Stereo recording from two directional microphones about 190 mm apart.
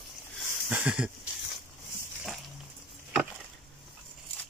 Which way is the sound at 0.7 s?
5° right (ahead or behind).